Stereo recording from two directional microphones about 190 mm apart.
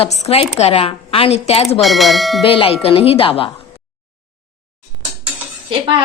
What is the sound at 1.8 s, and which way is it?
Speech, centre (ahead or behind).